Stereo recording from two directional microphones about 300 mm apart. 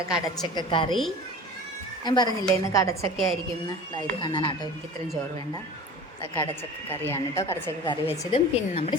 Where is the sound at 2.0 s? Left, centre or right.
Centre.